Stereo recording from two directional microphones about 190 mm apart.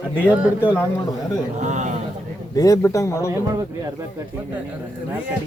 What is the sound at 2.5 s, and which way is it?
Speech, 15° left (ahead or behind).